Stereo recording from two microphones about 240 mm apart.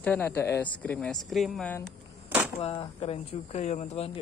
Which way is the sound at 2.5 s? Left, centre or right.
Left.